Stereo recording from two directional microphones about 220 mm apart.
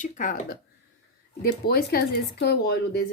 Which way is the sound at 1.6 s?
45° left (ahead or behind).